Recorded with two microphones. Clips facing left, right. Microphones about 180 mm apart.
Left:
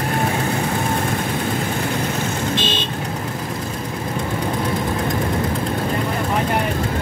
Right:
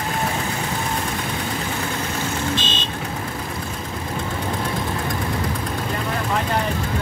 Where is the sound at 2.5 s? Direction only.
55° left (ahead or behind).